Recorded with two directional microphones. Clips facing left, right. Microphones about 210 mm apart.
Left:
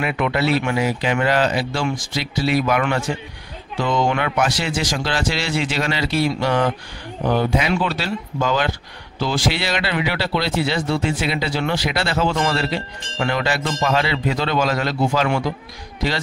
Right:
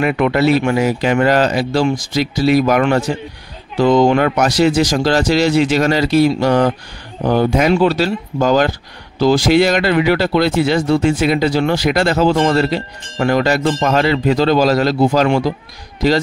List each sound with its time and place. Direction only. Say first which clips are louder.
0.0 s speech: right 7 dB; 45° right (ahead or behind)